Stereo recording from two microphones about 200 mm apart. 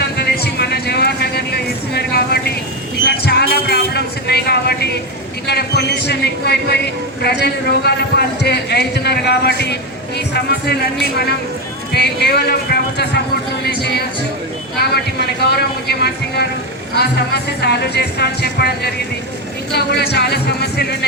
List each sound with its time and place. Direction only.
0.0 s vehicle: 55° left (ahead or behind)
3.1 s a sound: 55° left (ahead or behind)
5.5 s speech: 55° left (ahead or behind)
11.9 s speech: 55° left (ahead or behind)
14.8 s a man's voice: 55° left (ahead or behind)
19.7 s speech: 55° left (ahead or behind)